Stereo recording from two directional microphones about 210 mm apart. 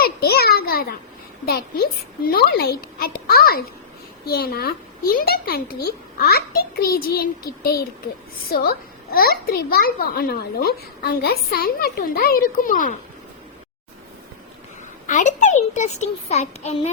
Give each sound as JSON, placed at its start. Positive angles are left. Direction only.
{"t": 0.0, "sound": "a sound", "side_deg": 50}
{"t": 1.5, "sound": "a child's voice", "side_deg": 45}
{"t": 15.0, "sound": "a child's voice", "side_deg": 35}